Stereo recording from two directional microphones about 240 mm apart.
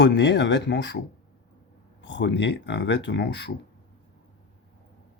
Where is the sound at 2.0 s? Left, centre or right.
Left.